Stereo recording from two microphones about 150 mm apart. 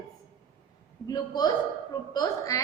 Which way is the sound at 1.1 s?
25° left (ahead or behind).